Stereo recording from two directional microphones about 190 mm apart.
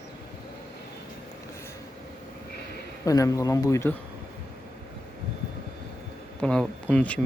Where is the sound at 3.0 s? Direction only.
20° left (ahead or behind).